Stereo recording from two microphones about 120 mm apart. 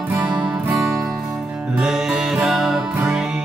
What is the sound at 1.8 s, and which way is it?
Music, 5° right (ahead or behind).